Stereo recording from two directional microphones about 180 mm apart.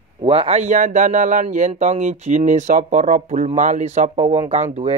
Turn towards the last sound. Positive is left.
turn(degrees=-35)  # may be behind; listen again after turning